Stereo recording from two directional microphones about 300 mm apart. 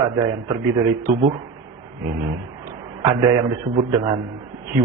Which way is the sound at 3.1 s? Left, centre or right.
Centre.